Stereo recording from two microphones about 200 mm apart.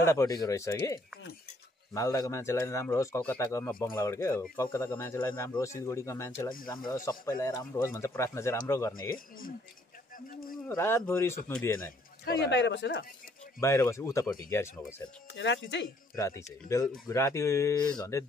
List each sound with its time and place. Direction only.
0.0 s speech: 15° left (ahead or behind)
10.1 s speech: 45° left (ahead or behind)
10.7 s speech: 15° left (ahead or behind)
12.4 s speech: 60° left (ahead or behind)
13.6 s speech: 15° left (ahead or behind)
15.3 s speech: 65° left (ahead or behind)
16.2 s speech: 15° left (ahead or behind)